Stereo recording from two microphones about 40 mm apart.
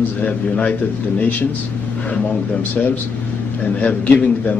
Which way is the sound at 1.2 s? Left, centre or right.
Left.